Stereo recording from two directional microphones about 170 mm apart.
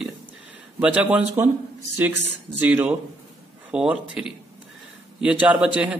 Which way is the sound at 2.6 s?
10° right (ahead or behind).